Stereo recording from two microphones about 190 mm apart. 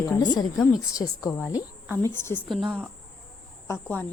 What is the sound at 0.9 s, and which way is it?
A woman's voice, 20° left (ahead or behind).